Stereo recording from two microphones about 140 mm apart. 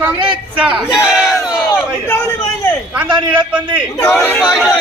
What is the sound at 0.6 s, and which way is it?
Speech, 10° right (ahead or behind).